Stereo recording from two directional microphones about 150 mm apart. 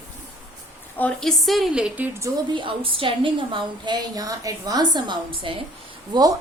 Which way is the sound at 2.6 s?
35° right (ahead or behind).